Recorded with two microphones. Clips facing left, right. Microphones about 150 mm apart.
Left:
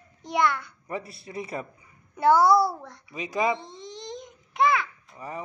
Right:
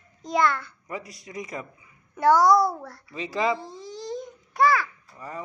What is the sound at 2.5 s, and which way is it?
Speech, centre (ahead or behind).